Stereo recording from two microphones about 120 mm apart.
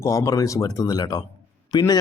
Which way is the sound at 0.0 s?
25° left (ahead or behind).